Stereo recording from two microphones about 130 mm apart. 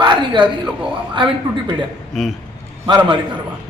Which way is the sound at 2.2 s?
Centre (ahead or behind).